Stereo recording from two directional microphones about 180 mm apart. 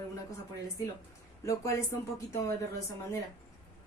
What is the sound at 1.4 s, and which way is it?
A woman's voice, 15° left (ahead or behind).